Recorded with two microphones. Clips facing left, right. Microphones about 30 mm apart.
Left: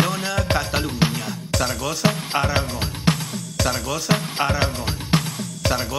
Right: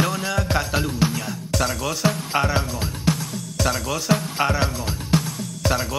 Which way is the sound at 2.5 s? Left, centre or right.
Left.